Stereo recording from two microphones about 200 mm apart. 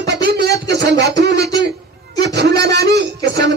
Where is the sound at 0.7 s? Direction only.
55° right (ahead or behind).